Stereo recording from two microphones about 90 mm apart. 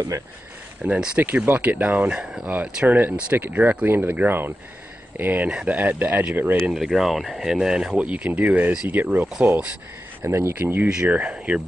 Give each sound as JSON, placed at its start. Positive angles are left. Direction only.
{"t": 0.8, "sound": "speech", "side_deg": -15}
{"t": 6.7, "sound": "speech", "side_deg": -5}
{"t": 10.2, "sound": "speech", "side_deg": -30}
{"t": 10.5, "sound": "speech", "side_deg": -20}